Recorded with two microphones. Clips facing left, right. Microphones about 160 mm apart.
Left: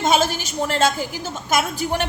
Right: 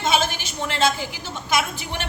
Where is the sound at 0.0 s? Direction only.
45° left (ahead or behind).